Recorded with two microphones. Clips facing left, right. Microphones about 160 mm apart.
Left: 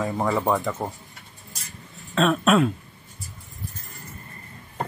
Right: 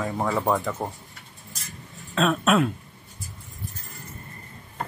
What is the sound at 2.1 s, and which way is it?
Speech, centre (ahead or behind).